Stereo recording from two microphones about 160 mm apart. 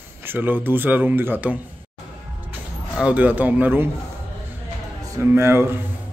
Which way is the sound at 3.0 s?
10° right (ahead or behind).